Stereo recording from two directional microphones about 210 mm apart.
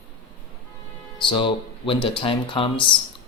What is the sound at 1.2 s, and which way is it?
Speech, 25° left (ahead or behind).